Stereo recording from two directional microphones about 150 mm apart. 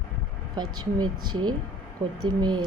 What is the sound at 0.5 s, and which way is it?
A woman's voice, 30° right (ahead or behind).